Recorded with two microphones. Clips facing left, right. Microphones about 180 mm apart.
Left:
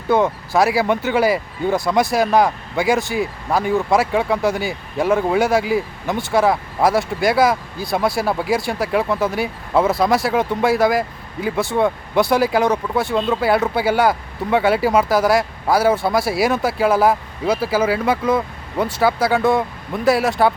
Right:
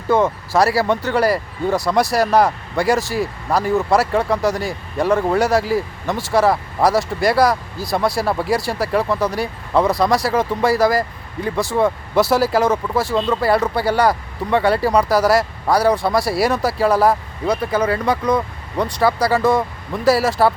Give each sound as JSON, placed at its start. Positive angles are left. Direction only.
{"t": 0.1, "sound": "speech", "side_deg": 0}